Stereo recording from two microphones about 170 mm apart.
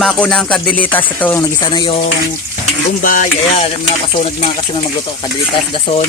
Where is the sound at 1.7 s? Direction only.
30° left (ahead or behind).